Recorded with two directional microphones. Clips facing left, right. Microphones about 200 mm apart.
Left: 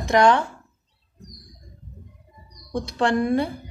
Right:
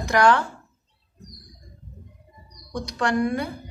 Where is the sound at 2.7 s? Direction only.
25° left (ahead or behind).